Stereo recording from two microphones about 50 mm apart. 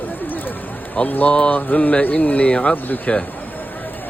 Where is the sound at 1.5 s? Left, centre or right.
Left.